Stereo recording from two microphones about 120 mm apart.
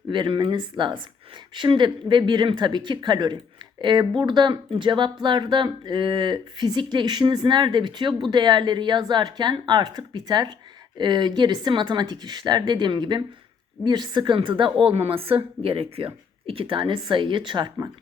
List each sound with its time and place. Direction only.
0.1 s a woman's voice: 40° right (ahead or behind)